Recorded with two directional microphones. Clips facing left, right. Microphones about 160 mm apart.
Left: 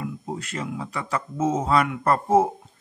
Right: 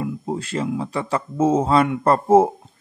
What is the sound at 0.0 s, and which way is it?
Speech, 30° right (ahead or behind).